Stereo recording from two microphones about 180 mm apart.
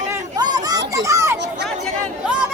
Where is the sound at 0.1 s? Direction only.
20° right (ahead or behind).